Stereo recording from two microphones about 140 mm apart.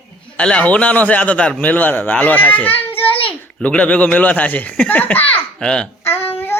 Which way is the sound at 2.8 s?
15° left (ahead or behind).